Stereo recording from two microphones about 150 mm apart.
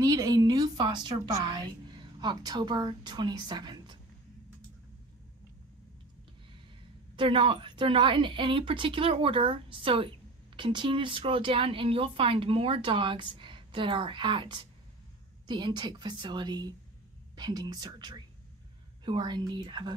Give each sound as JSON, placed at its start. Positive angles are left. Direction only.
{"t": 0.0, "sound": "a woman's voice", "side_deg": -25}
{"t": 7.2, "sound": "a woman's voice", "side_deg": -35}